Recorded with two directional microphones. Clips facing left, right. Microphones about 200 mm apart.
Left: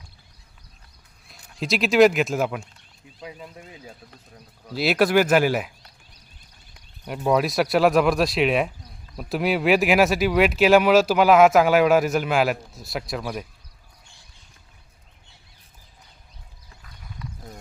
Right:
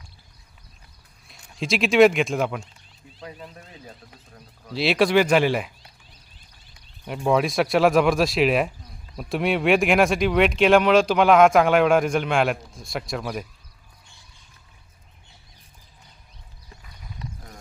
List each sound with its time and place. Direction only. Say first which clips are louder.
1.3 s speech: even; centre (ahead or behind)
7.1 s speech: even; centre (ahead or behind)
17.2 s a sound: right 1 dB; 25° right (ahead or behind)